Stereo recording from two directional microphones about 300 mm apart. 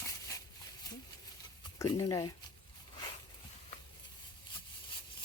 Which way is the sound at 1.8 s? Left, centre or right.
Centre.